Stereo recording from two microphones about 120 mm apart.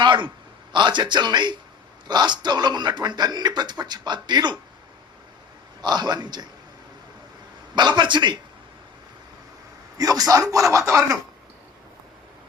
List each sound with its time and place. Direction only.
0.0 s a sound: 40° right (ahead or behind)
0.7 s speech: 40° right (ahead or behind)
5.8 s speech: 35° right (ahead or behind)
7.8 s speech: 40° right (ahead or behind)
10.0 s speech: 30° right (ahead or behind)